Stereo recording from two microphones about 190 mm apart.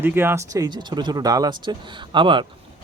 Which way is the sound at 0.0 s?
10° right (ahead or behind).